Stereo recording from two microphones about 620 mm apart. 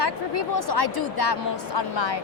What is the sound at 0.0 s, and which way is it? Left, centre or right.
A woman's voice, left.